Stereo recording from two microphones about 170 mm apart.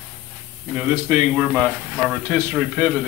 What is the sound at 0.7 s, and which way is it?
Speech, 10° right (ahead or behind).